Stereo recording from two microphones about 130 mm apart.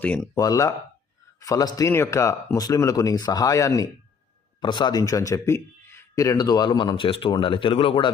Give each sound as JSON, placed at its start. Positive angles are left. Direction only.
{"t": 0.0, "sound": "speech", "side_deg": 10}
{"t": 0.3, "sound": "a man's voice", "side_deg": 25}